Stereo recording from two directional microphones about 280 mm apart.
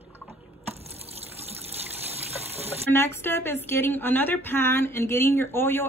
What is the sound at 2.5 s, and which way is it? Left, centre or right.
Water, right.